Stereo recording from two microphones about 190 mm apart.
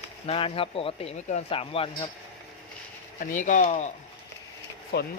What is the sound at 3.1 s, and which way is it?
Speech, 40° left (ahead or behind).